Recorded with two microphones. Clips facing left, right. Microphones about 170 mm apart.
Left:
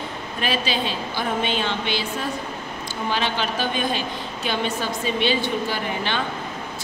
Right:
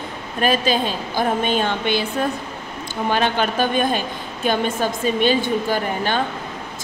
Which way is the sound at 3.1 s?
50° right (ahead or behind).